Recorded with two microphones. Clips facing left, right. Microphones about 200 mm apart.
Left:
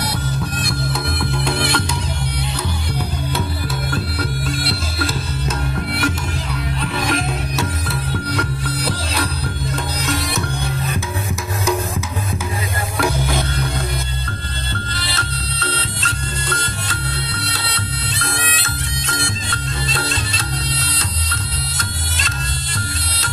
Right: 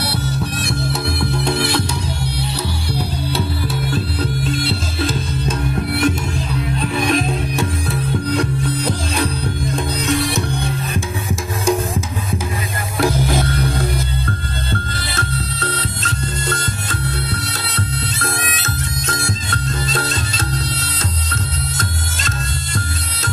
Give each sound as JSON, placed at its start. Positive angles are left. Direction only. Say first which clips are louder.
{"t": 0.6, "sound": "music", "louder": "right 2 dB", "side_deg": -25}
{"t": 4.4, "sound": "music", "louder": "right 3 dB", "side_deg": 10}
{"t": 5.5, "sound": "music", "louder": "right 3 dB", "side_deg": -25}
{"t": 15.0, "sound": "music", "louder": "right 3 dB", "side_deg": -50}